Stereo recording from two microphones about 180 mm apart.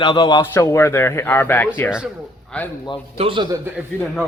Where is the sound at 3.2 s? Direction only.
30° right (ahead or behind).